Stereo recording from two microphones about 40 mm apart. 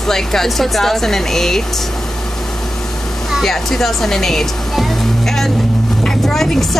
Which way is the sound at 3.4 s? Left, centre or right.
Centre.